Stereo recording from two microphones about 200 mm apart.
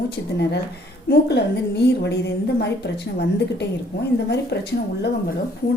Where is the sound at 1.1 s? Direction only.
55° left (ahead or behind).